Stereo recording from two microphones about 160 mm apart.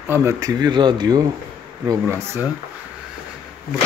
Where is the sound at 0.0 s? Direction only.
15° right (ahead or behind).